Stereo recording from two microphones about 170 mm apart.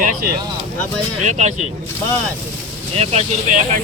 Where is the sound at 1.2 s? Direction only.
45° right (ahead or behind).